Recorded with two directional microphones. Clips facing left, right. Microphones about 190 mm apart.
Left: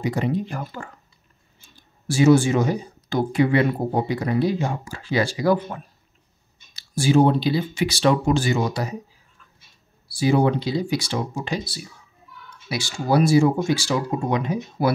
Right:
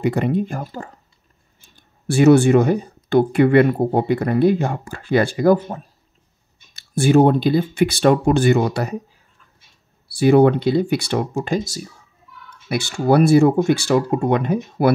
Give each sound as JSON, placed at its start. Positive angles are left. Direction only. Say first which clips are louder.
{"t": 0.0, "sound": "speech", "louder": "right 5 dB", "side_deg": -60}
{"t": 1.8, "sound": "speech", "louder": "right 4 dB", "side_deg": -60}
{"t": 6.7, "sound": "speech", "louder": "right 4 dB", "side_deg": -55}
{"t": 10.1, "sound": "speech", "louder": "right 6 dB", "side_deg": -60}
{"t": 12.6, "sound": "speech", "louder": "right 6 dB", "side_deg": -60}